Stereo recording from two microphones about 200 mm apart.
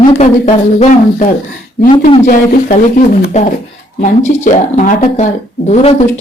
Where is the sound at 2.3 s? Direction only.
40° left (ahead or behind).